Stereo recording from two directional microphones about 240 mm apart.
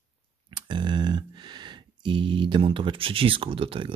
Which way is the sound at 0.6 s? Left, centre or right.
Centre.